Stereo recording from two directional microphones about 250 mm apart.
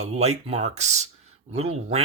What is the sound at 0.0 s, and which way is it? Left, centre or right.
Speech, right.